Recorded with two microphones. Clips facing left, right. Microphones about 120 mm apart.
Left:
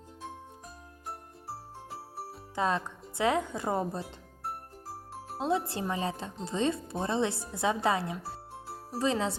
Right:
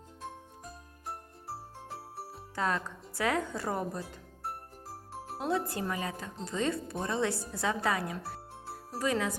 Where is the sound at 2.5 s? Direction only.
20° left (ahead or behind).